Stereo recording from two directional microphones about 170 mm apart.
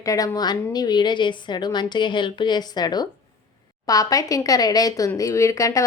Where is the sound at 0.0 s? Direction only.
20° left (ahead or behind).